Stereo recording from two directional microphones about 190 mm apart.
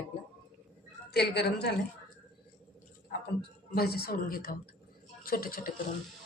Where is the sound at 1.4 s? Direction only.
60° left (ahead or behind).